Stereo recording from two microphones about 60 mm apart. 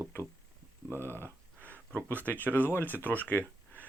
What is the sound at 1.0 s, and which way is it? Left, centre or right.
Speech, left.